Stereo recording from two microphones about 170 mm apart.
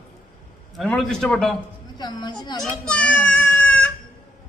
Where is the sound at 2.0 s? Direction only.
25° left (ahead or behind).